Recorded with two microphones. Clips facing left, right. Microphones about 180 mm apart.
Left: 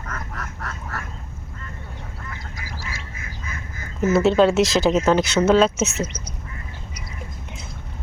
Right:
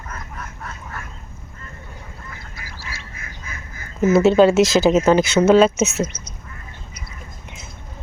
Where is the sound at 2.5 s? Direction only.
45° left (ahead or behind).